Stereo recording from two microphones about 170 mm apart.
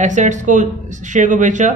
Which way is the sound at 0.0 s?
45° right (ahead or behind).